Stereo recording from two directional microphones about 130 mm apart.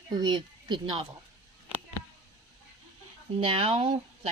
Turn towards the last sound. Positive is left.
turn(degrees=-45)  # may be behind; listen again after turning